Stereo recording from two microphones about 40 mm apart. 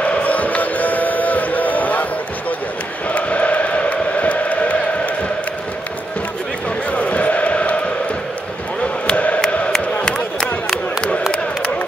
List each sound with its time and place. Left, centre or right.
0.0 s music: left
3.1 s chant: left
6.9 s chant: left
9.1 s music: left
9.4 s a sound: centre